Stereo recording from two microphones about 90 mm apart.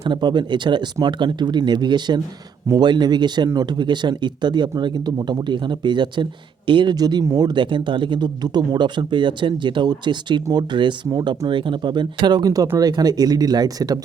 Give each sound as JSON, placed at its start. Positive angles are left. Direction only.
{"t": 0.0, "sound": "speech", "side_deg": -55}